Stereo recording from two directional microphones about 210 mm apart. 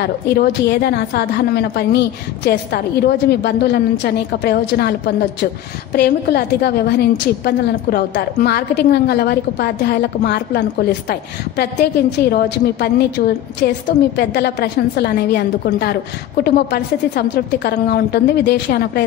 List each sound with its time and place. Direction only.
0.0 s a woman's voice: 50° left (ahead or behind)